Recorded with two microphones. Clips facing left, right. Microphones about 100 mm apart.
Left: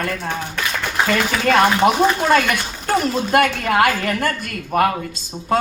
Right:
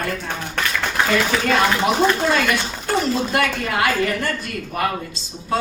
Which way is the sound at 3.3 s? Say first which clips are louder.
Left 5 dB; 50° left (ahead or behind).